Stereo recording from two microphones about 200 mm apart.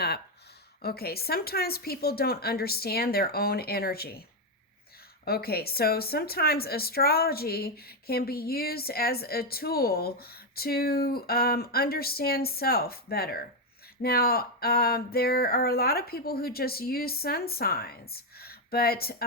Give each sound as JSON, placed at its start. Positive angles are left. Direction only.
{"t": 0.8, "sound": "a woman's voice", "side_deg": 50}
{"t": 5.2, "sound": "a woman's voice", "side_deg": 50}